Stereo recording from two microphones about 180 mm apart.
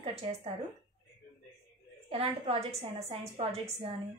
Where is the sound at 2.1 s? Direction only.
30° right (ahead or behind).